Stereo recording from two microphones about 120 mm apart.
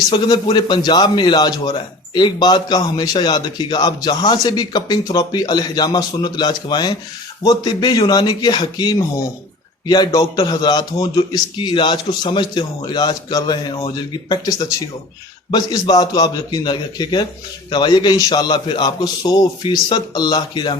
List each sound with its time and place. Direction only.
0.1 s a man's voice: 40° left (ahead or behind)